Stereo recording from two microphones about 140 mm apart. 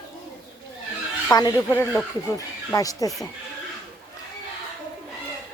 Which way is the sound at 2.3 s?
25° left (ahead or behind).